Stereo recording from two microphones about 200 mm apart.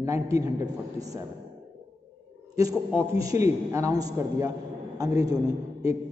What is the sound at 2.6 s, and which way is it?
A man's voice, 15° right (ahead or behind).